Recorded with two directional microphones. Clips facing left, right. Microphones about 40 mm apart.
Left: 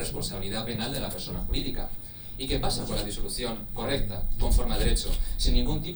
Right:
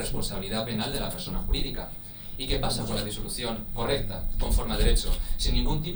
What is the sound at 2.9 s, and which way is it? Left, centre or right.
A man's voice, right.